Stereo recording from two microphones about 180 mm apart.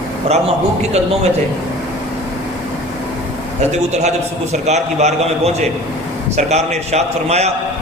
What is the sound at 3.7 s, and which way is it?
A man's voice, 40° right (ahead or behind).